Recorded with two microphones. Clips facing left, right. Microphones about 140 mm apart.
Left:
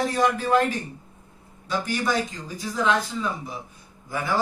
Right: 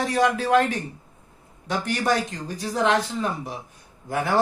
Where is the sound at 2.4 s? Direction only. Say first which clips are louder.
Right 3 dB; 65° right (ahead or behind).